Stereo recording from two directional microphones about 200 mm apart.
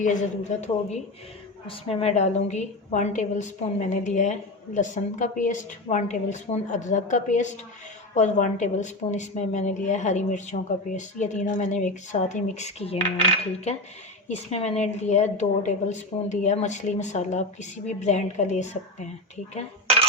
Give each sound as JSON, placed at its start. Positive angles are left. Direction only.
{"t": 0.0, "sound": "a woman's voice", "side_deg": 40}
{"t": 14.3, "sound": "a woman's voice", "side_deg": 35}